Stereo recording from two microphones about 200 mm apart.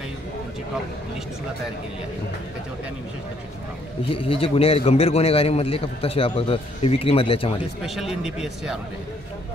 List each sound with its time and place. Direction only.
4.1 s a man's voice: 25° left (ahead or behind)
7.8 s a man's voice: centre (ahead or behind)